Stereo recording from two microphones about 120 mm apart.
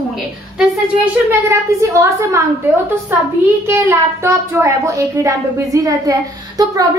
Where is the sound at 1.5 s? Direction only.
25° right (ahead or behind).